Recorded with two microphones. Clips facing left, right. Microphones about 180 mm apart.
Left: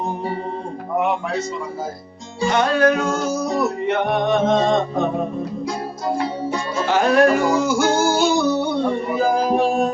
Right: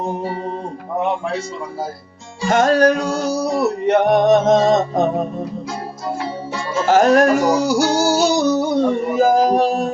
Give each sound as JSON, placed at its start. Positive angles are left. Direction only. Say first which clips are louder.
{"t": 2.5, "sound": "male singing", "louder": "right 3 dB", "side_deg": -45}
{"t": 6.8, "sound": "music", "louder": "right 3 dB", "side_deg": -45}